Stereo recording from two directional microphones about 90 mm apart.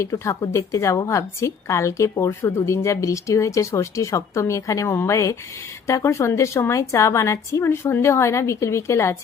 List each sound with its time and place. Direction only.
0.0 s speech: 30° left (ahead or behind)